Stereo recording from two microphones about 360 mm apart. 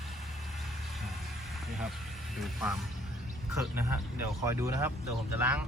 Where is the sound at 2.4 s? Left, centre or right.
Centre.